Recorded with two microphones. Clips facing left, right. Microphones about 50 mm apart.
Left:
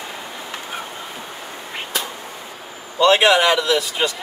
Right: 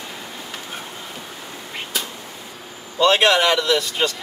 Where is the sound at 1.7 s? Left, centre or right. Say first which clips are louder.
Left 2 dB; centre.